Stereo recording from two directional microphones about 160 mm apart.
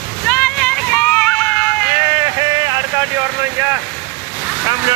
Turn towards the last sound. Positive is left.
turn(degrees=-25)  # may be behind; listen again after turning